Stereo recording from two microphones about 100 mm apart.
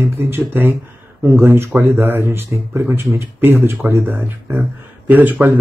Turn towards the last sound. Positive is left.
turn(degrees=-15)  # may be behind; listen again after turning